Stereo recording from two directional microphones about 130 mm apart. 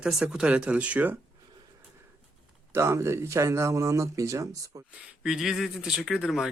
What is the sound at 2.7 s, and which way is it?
Speech, 20° right (ahead or behind).